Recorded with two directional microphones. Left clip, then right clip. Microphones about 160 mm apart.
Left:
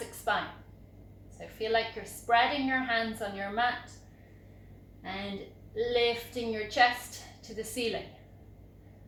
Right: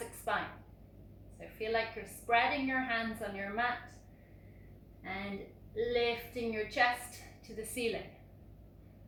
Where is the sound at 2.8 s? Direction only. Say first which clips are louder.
Left 5 dB; 40° left (ahead or behind).